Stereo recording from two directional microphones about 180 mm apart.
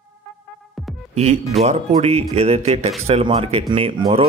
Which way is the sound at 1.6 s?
35° right (ahead or behind).